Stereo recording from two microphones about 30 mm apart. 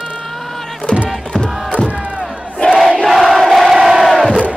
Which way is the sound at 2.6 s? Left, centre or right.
Left.